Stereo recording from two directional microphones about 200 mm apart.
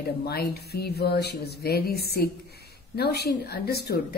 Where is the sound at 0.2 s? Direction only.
50° left (ahead or behind).